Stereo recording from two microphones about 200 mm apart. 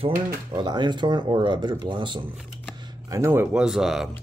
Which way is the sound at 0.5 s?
20° right (ahead or behind).